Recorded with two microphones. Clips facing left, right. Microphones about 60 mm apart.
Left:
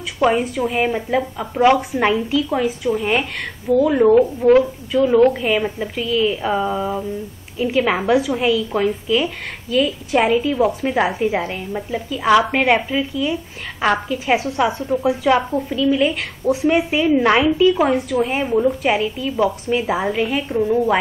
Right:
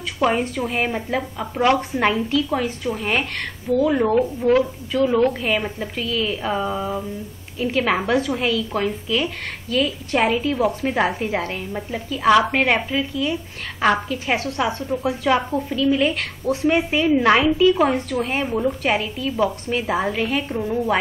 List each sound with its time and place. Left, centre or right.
0.2 s a woman's voice: centre
12.7 s speech: centre
13.7 s a woman's voice: centre
14.4 s a woman's voice: centre
15.2 s a woman's voice: centre